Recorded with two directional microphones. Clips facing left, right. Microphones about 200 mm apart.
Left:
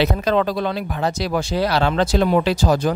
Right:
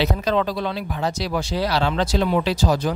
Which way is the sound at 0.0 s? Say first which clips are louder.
Left 3 dB; 55° left (ahead or behind).